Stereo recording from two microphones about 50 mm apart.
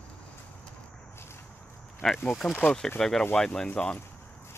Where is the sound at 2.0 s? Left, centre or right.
Centre.